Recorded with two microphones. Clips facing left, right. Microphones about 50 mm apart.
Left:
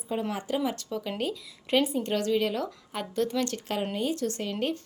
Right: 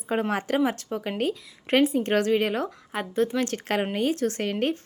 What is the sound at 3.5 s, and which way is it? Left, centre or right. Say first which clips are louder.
Speech: right 4 dB; right.